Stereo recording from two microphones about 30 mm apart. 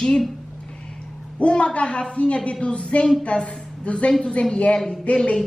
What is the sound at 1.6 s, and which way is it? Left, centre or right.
A woman's voice, left.